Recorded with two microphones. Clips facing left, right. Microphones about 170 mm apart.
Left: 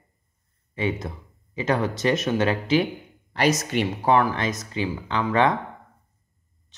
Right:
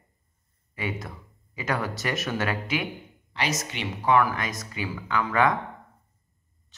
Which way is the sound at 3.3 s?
40° left (ahead or behind).